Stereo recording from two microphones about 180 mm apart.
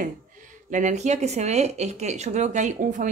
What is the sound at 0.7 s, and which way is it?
Speech, 45° right (ahead or behind).